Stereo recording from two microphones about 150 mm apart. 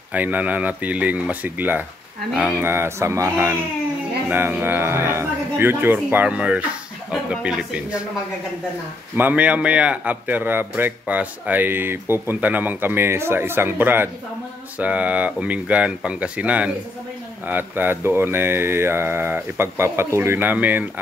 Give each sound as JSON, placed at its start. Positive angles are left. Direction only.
{"t": 0.1, "sound": "a man's voice", "side_deg": -10}
{"t": 9.1, "sound": "a man's voice", "side_deg": -10}